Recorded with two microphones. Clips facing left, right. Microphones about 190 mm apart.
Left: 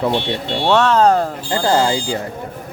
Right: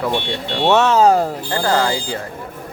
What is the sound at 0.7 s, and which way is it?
Speech, 5° right (ahead or behind).